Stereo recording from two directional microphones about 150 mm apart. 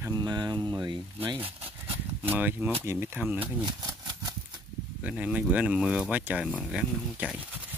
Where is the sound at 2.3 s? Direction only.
15° right (ahead or behind).